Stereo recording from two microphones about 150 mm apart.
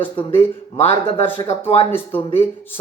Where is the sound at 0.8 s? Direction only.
45° left (ahead or behind).